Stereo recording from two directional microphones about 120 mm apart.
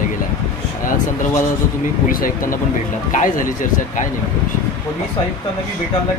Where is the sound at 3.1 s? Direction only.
90° left.